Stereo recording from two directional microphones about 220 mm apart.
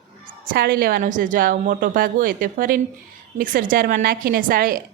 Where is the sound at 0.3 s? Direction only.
45° right (ahead or behind).